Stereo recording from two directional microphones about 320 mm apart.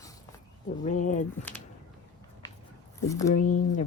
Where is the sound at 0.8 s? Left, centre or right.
Left.